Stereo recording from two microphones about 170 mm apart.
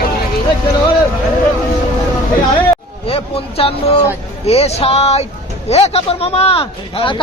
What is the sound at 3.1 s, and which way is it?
Speech, 35° left (ahead or behind).